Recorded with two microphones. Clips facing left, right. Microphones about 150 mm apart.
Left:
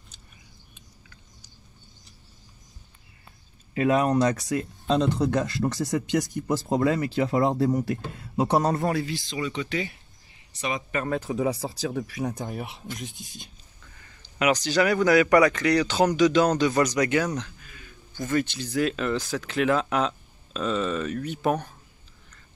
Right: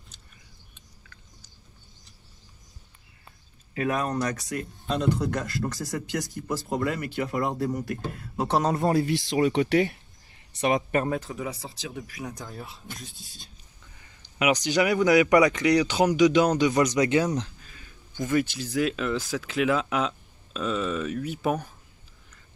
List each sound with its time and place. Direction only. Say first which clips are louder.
3.7 s speech: left 5 dB; 20° left (ahead or behind)
8.5 s speech: even; centre (ahead or behind)
9.4 s speech: right 8 dB; 55° right (ahead or behind)
11.2 s speech: left 8 dB; 25° left (ahead or behind)
11.8 s speech: left 7 dB; 45° left (ahead or behind)
12.4 s speech: left 6 dB; 20° left (ahead or behind)
14.2 s speech: left 1 dB; 15° right (ahead or behind)
18.4 s speech: even; 5° right (ahead or behind)